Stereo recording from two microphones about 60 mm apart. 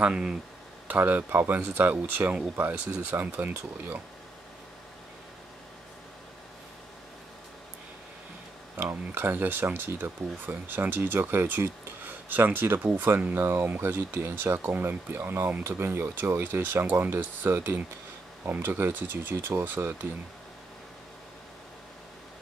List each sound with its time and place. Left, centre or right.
0.0 s speech: centre
0.8 s speech: right
8.7 s speech: right